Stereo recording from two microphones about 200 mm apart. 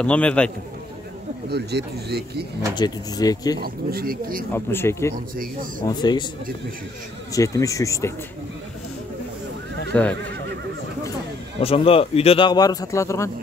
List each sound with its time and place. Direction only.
0.0 s speech: 5° left (ahead or behind)
1.5 s speech: 55° right (ahead or behind)
2.7 s a man's voice: 20° left (ahead or behind)
3.6 s speech: 50° right (ahead or behind)
4.5 s a man's voice: 10° left (ahead or behind)
7.3 s speech: 15° left (ahead or behind)
9.9 s speech: 5° left (ahead or behind)
11.6 s a man's voice: 30° left (ahead or behind)